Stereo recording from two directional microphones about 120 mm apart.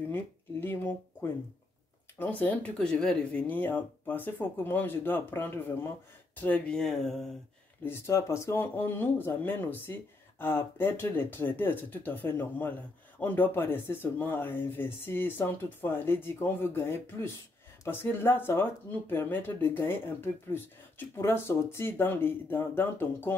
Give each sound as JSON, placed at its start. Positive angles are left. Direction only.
{"t": 0.1, "sound": "a sound", "side_deg": 15}
{"t": 2.1, "sound": "speech", "side_deg": 15}
{"t": 7.8, "sound": "speech", "side_deg": 25}